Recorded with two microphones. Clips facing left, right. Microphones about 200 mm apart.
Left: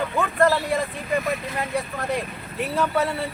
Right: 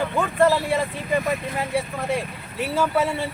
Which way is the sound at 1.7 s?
5° right (ahead or behind).